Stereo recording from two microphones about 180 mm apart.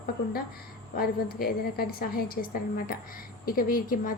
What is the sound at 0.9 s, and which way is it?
A woman's voice, 55° left (ahead or behind).